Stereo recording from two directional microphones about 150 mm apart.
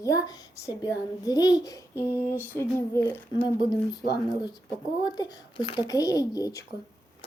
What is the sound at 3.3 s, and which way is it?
Speech, 30° left (ahead or behind).